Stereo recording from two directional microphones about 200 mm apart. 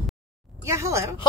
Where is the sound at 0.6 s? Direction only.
15° right (ahead or behind).